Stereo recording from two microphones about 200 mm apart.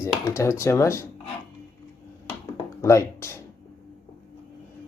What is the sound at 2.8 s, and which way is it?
Speech, 15° left (ahead or behind).